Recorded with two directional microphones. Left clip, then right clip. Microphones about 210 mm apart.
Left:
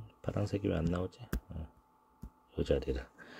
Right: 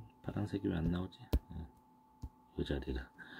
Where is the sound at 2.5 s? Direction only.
30° left (ahead or behind).